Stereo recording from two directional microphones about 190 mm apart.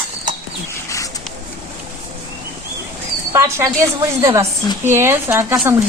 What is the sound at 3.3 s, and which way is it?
Speech, 15° right (ahead or behind).